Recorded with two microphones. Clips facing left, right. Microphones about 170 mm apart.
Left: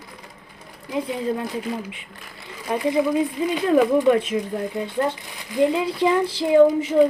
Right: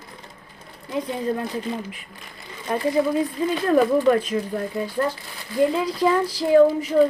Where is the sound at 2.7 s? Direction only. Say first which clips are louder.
Even; 15° left (ahead or behind).